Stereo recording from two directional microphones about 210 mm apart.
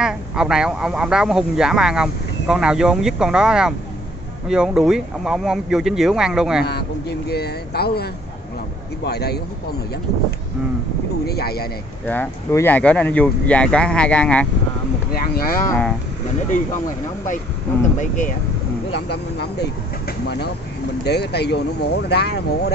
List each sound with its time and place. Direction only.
0.0 s speech: 5° right (ahead or behind)
6.6 s speech: 50° left (ahead or behind)
11.2 s speech: 50° left (ahead or behind)
12.1 s speech: 10° left (ahead or behind)
15.1 s speech: 45° left (ahead or behind)
17.9 s speech: 35° left (ahead or behind)
18.9 s speech: 50° left (ahead or behind)